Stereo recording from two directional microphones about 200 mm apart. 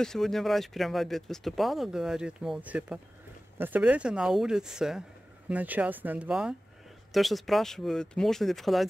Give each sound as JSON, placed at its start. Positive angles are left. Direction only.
{"t": 0.0, "sound": "speech", "side_deg": 0}